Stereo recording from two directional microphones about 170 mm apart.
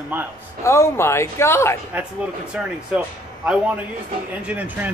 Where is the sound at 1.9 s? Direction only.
5° right (ahead or behind).